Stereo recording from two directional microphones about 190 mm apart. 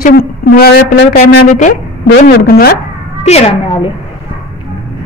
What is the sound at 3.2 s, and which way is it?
Speech, 30° left (ahead or behind).